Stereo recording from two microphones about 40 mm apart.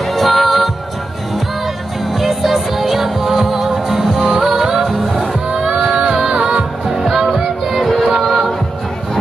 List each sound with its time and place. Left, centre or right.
0.0 s music: centre
2.1 s music: centre
5.5 s a sound: right
6.0 s music: centre
6.9 s music: centre